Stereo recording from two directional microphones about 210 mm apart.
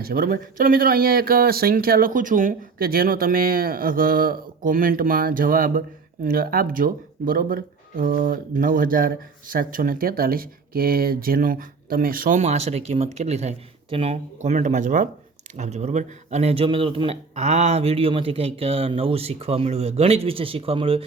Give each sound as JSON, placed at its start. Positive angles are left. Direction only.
{"t": 0.0, "sound": "speech", "side_deg": -45}